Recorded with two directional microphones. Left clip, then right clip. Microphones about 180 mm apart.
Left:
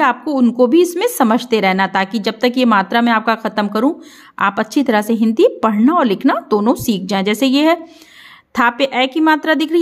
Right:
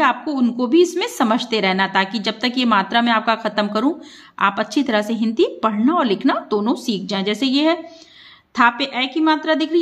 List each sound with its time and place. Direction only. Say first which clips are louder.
0.0 s a woman's voice: left 3 dB; 45° left (ahead or behind)